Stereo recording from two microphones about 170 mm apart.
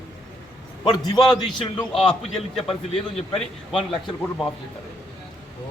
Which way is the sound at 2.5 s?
35° left (ahead or behind).